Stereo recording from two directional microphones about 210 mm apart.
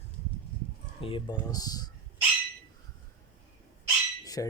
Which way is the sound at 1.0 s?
25° left (ahead or behind).